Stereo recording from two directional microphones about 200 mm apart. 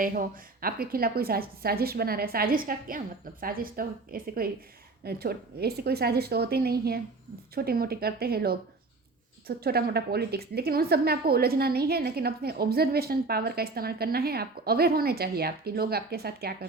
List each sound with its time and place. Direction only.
0.0 s a woman's voice: 45° right (ahead or behind)